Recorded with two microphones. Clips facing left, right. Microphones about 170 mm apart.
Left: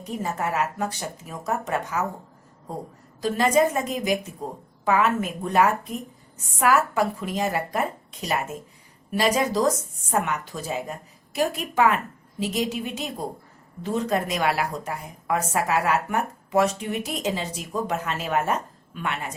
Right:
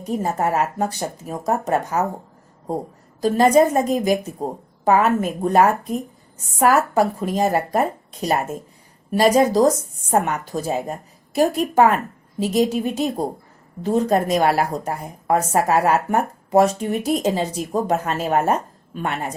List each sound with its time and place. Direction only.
0.0 s speech: 40° right (ahead or behind)
3.2 s speech: 40° right (ahead or behind)